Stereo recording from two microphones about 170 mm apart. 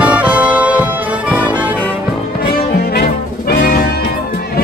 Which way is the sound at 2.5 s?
65° left (ahead or behind).